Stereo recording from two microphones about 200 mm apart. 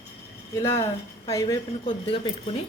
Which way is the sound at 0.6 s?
15° left (ahead or behind).